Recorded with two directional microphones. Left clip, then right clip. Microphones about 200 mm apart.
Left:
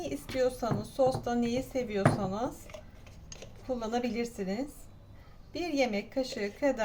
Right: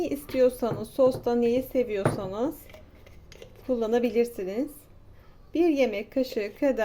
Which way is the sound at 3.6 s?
45° right (ahead or behind).